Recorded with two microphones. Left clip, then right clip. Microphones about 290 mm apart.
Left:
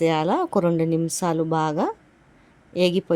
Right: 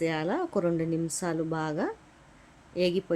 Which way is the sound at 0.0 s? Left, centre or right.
Left.